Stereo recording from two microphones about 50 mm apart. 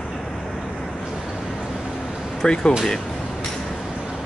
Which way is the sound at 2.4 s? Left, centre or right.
Centre.